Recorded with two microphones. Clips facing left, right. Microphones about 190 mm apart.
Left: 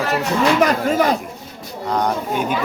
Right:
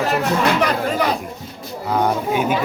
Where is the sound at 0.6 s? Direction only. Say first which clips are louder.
Left 3 dB; 45° left (ahead or behind).